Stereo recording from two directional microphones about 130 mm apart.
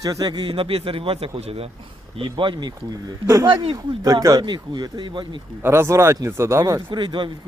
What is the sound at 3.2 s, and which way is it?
Speech, 25° right (ahead or behind).